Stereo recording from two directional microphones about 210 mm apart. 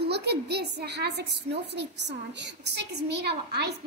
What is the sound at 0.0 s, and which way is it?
A child's voice, 50° right (ahead or behind).